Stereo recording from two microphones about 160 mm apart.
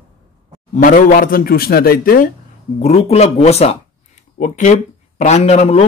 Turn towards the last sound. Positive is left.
turn(degrees=40)  # may be behind; listen again after turning